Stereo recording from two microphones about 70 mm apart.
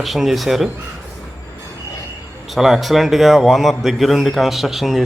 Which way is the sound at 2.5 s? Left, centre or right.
Centre.